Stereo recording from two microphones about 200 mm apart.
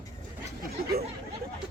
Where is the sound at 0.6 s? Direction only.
50° right (ahead or behind).